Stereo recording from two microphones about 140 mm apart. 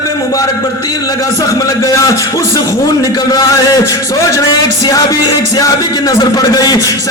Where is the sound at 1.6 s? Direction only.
25° left (ahead or behind).